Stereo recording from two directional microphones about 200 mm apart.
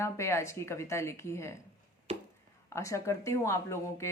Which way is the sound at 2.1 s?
30° right (ahead or behind).